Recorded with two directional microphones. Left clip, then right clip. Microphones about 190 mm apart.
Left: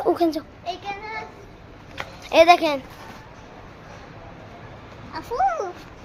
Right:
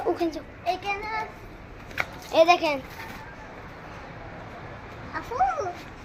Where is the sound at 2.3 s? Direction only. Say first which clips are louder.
Left 5 dB; 45° left (ahead or behind).